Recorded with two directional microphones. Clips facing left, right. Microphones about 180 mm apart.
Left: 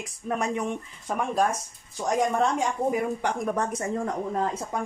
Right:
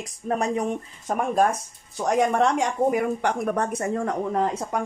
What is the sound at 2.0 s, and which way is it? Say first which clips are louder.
Speech: right 3 dB; 70° right (ahead or behind).